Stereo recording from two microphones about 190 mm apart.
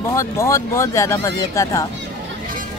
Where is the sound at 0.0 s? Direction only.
15° left (ahead or behind).